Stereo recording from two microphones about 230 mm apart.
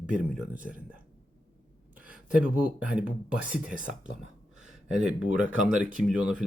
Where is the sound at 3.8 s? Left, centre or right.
Right.